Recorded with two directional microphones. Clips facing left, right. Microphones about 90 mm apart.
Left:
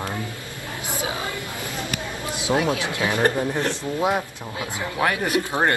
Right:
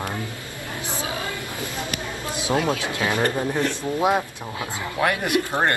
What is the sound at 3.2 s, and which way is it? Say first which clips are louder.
Speech: left 3 dB; 15° left (ahead or behind).